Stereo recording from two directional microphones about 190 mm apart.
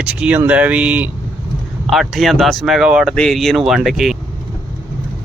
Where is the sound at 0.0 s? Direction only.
5° right (ahead or behind).